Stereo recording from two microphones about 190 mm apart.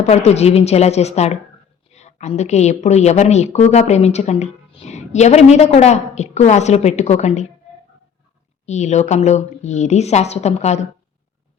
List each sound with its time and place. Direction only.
0.0 s a woman's voice: 35° left (ahead or behind)
8.6 s a woman's voice: 35° left (ahead or behind)